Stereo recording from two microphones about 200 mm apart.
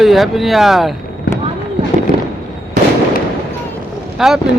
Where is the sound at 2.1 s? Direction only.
45° left (ahead or behind).